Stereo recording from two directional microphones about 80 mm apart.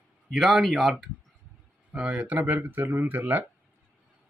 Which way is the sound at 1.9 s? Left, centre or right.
Centre.